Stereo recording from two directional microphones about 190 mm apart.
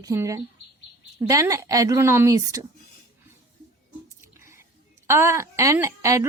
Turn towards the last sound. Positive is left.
turn(degrees=-15)  # may be behind; listen again after turning